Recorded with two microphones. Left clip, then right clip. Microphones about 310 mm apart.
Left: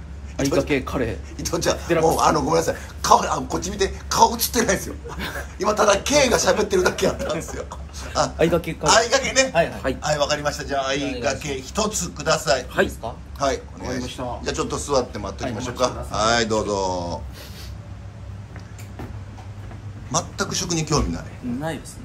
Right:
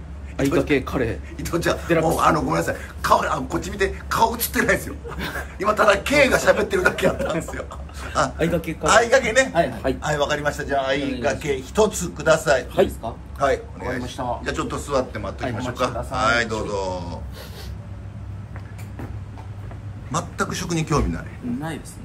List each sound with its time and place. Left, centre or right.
0.4 s speech: centre
8.4 s speech: left
8.8 s a man's voice: centre
20.1 s a man's voice: centre